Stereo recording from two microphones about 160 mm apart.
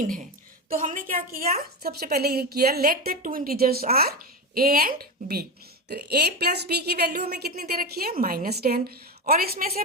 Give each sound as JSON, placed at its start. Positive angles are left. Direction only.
{"t": 0.0, "sound": "a woman's voice", "side_deg": -55}
{"t": 1.8, "sound": "a woman's voice", "side_deg": -75}
{"t": 5.9, "sound": "a woman's voice", "side_deg": -90}